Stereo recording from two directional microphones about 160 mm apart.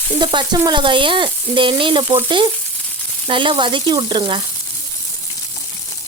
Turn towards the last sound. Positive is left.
turn(degrees=-30)  # may be behind; listen again after turning